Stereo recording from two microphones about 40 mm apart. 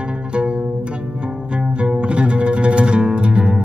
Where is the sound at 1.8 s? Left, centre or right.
Right.